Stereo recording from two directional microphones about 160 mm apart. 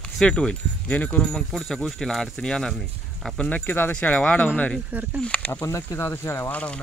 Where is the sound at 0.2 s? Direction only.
5° left (ahead or behind).